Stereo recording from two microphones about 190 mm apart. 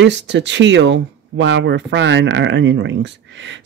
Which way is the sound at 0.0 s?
70° right (ahead or behind).